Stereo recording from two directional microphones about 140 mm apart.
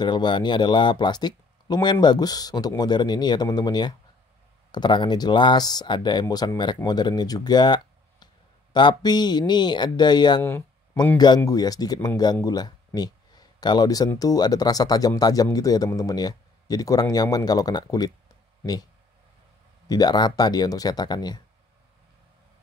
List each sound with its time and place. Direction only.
0.0 s speech: 35° left (ahead or behind)
19.9 s speech: 30° left (ahead or behind)